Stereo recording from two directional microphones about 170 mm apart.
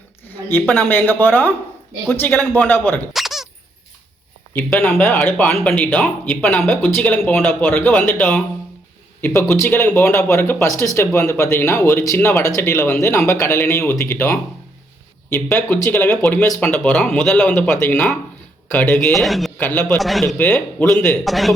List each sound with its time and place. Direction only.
0.3 s a sound: 10° left (ahead or behind)
0.7 s speech: 10° left (ahead or behind)
3.1 s squeak: centre (ahead or behind)
4.5 s speech: 5° left (ahead or behind)